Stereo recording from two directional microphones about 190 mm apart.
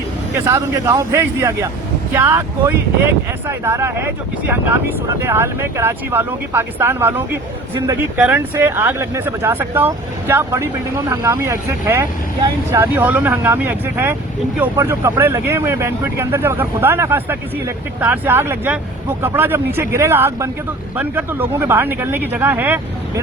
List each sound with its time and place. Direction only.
0.4 s speech: 15° right (ahead or behind)